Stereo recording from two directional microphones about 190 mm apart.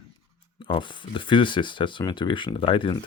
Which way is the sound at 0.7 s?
25° left (ahead or behind).